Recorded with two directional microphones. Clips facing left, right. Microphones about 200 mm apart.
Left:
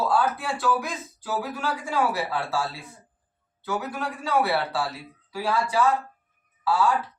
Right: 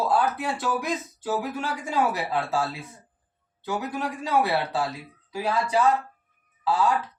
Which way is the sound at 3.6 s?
20° right (ahead or behind).